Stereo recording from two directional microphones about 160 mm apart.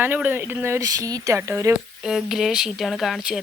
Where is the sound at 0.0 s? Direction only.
10° right (ahead or behind).